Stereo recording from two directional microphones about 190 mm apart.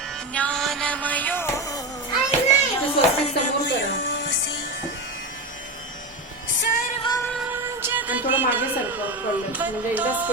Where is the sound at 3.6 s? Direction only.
70° left (ahead or behind).